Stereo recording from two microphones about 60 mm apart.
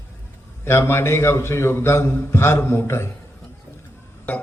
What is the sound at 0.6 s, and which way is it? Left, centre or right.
A man's voice, left.